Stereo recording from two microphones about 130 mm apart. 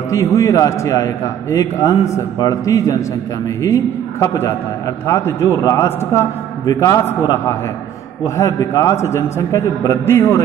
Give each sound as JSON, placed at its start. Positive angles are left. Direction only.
{"t": 0.1, "sound": "a man's voice", "side_deg": 25}
{"t": 7.1, "sound": "a man's voice", "side_deg": 20}